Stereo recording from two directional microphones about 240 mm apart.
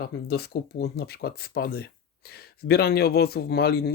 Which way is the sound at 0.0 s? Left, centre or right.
Left.